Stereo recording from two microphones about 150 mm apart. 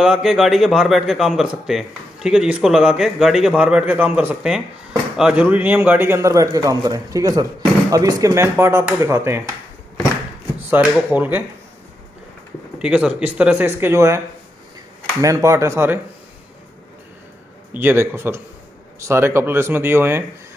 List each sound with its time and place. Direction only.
0.0 s a man's voice: 5° right (ahead or behind)
10.7 s speech: 10° right (ahead or behind)
12.7 s speech: 5° right (ahead or behind)
15.2 s a man's voice: 20° right (ahead or behind)
17.7 s speech: 15° right (ahead or behind)